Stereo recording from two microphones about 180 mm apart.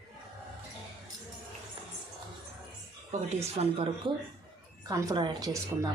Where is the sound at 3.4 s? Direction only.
35° right (ahead or behind).